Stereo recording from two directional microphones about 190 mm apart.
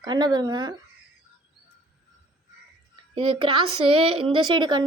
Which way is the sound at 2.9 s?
25° right (ahead or behind).